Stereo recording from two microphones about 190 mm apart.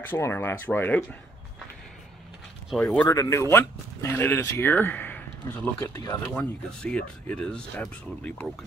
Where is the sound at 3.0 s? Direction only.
15° left (ahead or behind).